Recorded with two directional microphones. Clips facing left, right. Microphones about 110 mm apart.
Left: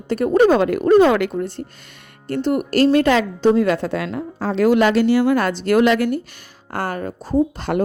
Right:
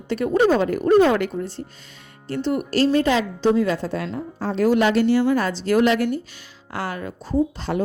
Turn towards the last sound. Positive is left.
turn(degrees=55)  # may be behind; listen again after turning